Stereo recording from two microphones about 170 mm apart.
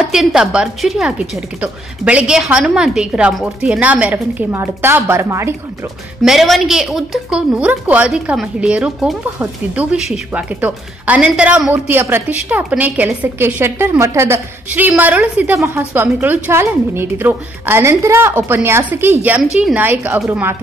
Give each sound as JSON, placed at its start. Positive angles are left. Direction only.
{"t": 0.0, "sound": "a woman's voice", "side_deg": 0}
{"t": 6.2, "sound": "speech", "side_deg": 0}